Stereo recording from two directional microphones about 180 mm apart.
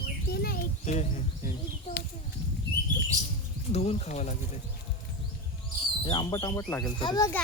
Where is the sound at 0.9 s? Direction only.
40° left (ahead or behind).